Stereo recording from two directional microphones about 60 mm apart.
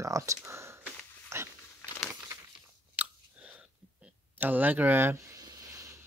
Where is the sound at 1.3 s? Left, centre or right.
Right.